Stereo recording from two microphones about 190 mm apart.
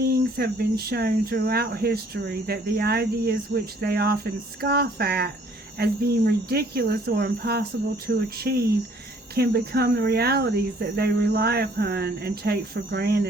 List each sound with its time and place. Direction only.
0.0 s speech: 55° right (ahead or behind)